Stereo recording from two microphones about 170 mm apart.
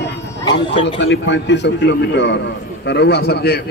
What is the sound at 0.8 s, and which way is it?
Speech, 90° left.